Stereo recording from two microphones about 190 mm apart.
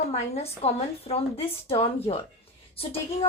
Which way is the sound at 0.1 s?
35° left (ahead or behind).